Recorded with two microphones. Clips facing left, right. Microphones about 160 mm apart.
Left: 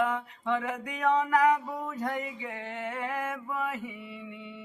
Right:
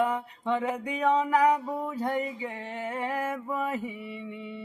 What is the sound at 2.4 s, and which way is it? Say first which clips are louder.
Music: right 2 dB; 30° right (ahead or behind).